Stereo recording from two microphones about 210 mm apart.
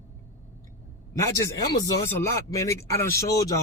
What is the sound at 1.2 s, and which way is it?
Speech, 15° left (ahead or behind).